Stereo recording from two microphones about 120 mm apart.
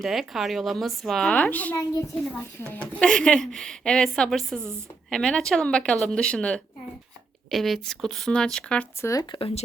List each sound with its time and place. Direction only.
0.0 s speech: centre (ahead or behind); by 1.8 s 15° left (ahead or behind)
2.8 s speech: 10° left (ahead or behind)
9.0 s speech: 25° left (ahead or behind)